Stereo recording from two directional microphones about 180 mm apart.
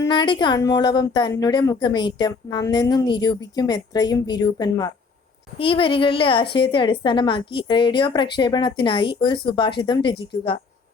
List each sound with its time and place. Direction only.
0.0 s a woman's voice: 25° left (ahead or behind)